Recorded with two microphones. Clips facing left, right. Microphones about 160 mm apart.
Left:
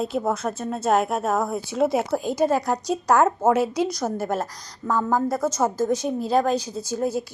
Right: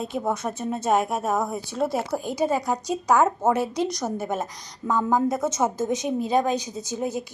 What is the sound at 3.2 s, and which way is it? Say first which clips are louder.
A woman's voice: left 2 dB; 5° left (ahead or behind).